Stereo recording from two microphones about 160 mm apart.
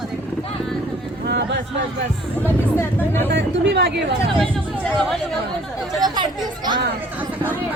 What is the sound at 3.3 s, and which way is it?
Speech, 90° right.